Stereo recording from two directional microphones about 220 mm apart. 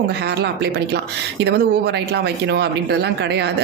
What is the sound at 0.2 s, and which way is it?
A woman's voice, 50° right (ahead or behind).